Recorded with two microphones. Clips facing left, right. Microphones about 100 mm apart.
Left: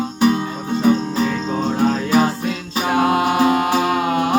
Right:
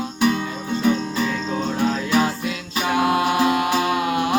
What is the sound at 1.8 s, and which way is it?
Music, 40° left (ahead or behind).